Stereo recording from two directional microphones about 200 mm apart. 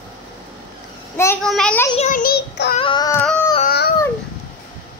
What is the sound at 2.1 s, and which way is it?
Child singing, 45° left (ahead or behind).